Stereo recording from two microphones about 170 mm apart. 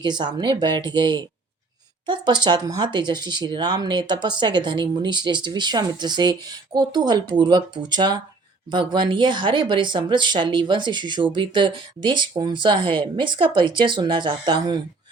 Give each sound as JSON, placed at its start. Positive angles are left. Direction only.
{"t": 0.0, "sound": "speech", "side_deg": -25}